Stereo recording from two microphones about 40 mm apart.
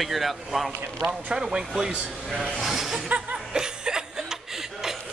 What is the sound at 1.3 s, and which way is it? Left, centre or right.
Speech, centre.